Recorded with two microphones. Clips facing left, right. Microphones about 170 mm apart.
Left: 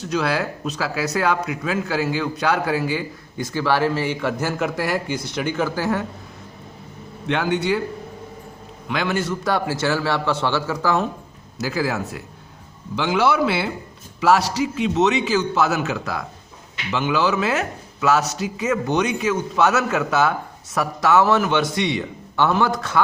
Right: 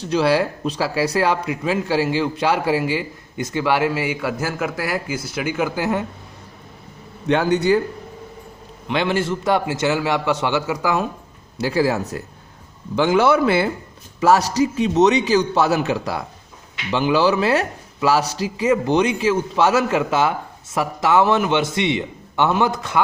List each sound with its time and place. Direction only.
0.1 s speech: 30° right (ahead or behind)
7.3 s a man's voice: 40° right (ahead or behind)
8.9 s speech: 25° right (ahead or behind)
11.5 s a man's voice: 30° right (ahead or behind)
13.0 s a man's voice: 50° right (ahead or behind); by 23.0 s 20° right (ahead or behind)